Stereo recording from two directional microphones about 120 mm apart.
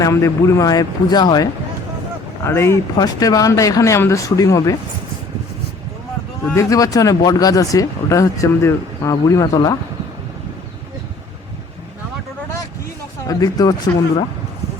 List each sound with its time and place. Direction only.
0.0 s a man's voice: 25° left (ahead or behind)
2.4 s speech: 20° left (ahead or behind)
2.9 s speech: 30° left (ahead or behind)
6.4 s speech: 25° left (ahead or behind)
13.2 s a man's voice: 30° left (ahead or behind)